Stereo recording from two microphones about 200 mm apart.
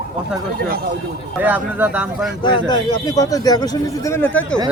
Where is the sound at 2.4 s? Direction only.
25° left (ahead or behind).